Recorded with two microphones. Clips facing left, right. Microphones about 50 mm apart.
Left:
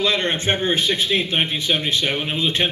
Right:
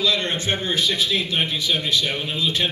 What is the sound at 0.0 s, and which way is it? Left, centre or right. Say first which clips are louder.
A man's voice: left 2 dB; left.